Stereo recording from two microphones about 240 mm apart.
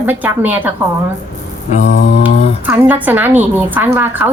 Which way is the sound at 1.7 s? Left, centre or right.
Left.